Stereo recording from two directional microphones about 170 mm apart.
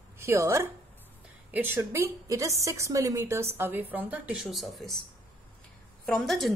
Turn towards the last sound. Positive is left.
turn(degrees=0)  # may be behind; listen again after turning